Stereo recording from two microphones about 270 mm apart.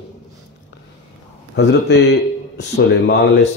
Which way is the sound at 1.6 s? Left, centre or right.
Left.